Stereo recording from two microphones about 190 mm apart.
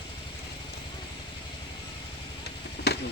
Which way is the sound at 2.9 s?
60° left (ahead or behind).